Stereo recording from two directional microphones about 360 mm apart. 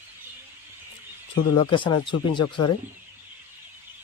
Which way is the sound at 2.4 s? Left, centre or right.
Left.